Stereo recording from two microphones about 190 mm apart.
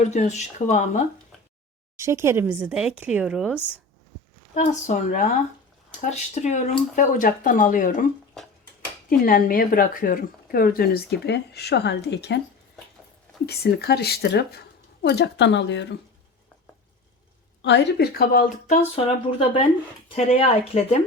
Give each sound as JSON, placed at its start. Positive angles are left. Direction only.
{"t": 0.0, "sound": "speech", "side_deg": 40}
{"t": 2.0, "sound": "speech", "side_deg": -15}
{"t": 4.5, "sound": "speech", "side_deg": 40}
{"t": 8.4, "sound": "tick-tock", "side_deg": 0}
{"t": 9.0, "sound": "speech", "side_deg": 50}
{"t": 13.4, "sound": "speech", "side_deg": 60}
{"t": 17.6, "sound": "speech", "side_deg": 65}
{"t": 18.9, "sound": "speech", "side_deg": 30}